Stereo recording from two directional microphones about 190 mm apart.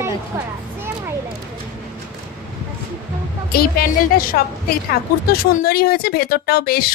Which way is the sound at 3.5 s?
50° left (ahead or behind).